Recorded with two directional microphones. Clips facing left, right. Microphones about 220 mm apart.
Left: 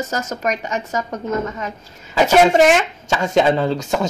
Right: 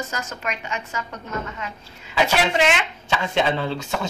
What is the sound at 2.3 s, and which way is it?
Speech, 45° left (ahead or behind).